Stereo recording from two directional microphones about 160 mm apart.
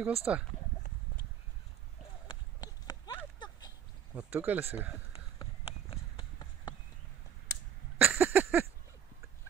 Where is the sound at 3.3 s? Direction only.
25° left (ahead or behind).